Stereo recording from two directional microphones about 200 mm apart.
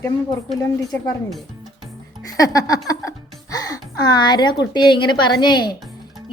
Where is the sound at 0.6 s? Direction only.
15° left (ahead or behind).